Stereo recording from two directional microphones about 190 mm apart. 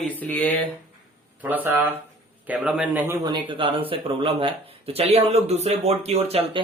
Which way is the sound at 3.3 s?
25° right (ahead or behind).